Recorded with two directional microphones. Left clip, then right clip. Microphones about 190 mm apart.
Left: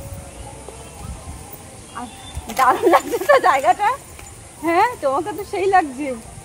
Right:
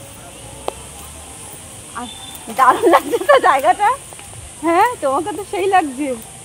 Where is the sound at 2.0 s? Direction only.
45° right (ahead or behind).